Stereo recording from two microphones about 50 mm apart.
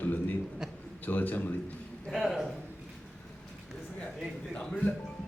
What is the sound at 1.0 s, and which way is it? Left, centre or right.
Speech, left.